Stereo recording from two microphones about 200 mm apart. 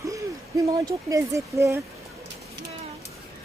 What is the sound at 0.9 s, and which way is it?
Speech, 15° right (ahead or behind).